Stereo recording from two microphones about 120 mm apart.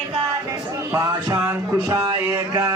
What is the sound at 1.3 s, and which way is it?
Music, 20° right (ahead or behind).